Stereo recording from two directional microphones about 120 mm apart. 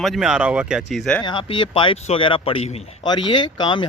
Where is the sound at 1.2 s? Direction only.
40° left (ahead or behind).